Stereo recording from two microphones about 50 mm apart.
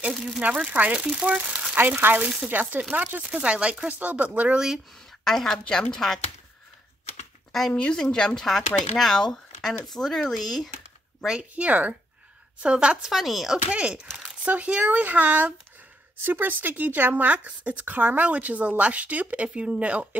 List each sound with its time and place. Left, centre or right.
0.1 s speech: centre
0.7 s speech: right
1.8 s speech: right
3.3 s speech: right
5.2 s speech: centre
7.7 s speech: centre
11.5 s speech: right
12.6 s speech: centre
13.1 s speech: centre
13.7 s speech: centre
14.4 s speech: right
16.3 s speech: right